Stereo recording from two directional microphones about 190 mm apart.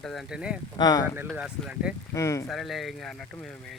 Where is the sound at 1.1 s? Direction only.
10° right (ahead or behind).